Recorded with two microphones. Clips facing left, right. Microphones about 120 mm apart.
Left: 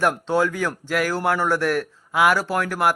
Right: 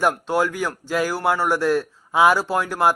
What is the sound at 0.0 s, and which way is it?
A man's voice, 10° right (ahead or behind).